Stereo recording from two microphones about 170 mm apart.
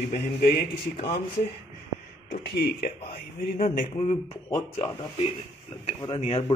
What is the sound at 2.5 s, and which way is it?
Speech, 70° left (ahead or behind).